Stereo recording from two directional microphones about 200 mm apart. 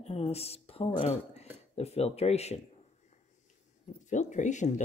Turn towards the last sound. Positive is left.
turn(degrees=35)  # may be behind; listen again after turning